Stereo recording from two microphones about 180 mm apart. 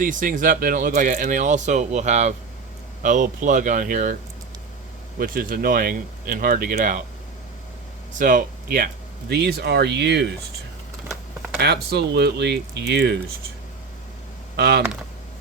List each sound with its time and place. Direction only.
0.0 s speech: 50° right (ahead or behind)
5.2 s speech: 50° right (ahead or behind)
8.2 s speech: 50° right (ahead or behind)
9.3 s speech: 65° right (ahead or behind)
11.5 s speech: 65° right (ahead or behind)
14.5 s speech: 65° right (ahead or behind)